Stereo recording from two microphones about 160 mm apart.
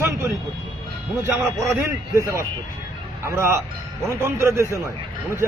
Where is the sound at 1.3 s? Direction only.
20° right (ahead or behind).